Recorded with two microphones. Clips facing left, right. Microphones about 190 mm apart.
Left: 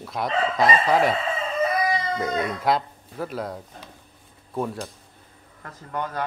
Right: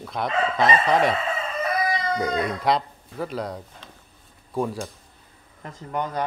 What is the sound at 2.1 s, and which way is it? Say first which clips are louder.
Speech: right 1 dB; centre (ahead or behind).